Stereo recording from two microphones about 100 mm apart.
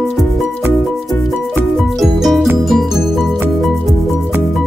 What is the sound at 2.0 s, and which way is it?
Music, centre (ahead or behind).